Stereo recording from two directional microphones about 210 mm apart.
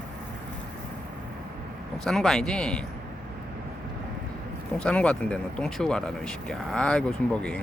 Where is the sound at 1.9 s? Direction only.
Centre (ahead or behind).